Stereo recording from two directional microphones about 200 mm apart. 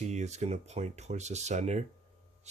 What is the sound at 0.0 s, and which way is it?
Speech, 35° right (ahead or behind).